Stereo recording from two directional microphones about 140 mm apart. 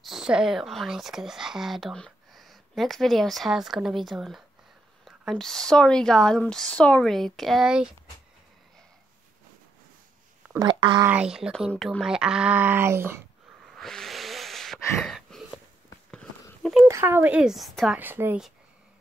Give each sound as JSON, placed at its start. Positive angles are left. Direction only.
{"t": 0.0, "sound": "a woman's voice", "side_deg": -5}
{"t": 10.6, "sound": "speech", "side_deg": -35}
{"t": 11.0, "sound": "a woman's voice", "side_deg": -10}
{"t": 13.7, "sound": "a sound", "side_deg": 5}
{"t": 16.8, "sound": "speech", "side_deg": -20}
{"t": 17.9, "sound": "speech", "side_deg": -15}